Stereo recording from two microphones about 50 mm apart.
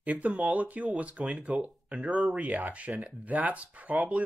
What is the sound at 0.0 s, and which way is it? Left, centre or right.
Speech, right.